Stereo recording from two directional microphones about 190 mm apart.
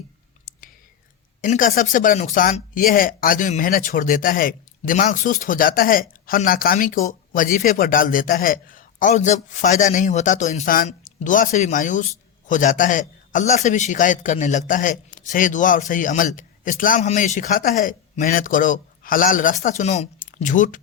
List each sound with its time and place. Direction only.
1.4 s a man's voice: 45° left (ahead or behind)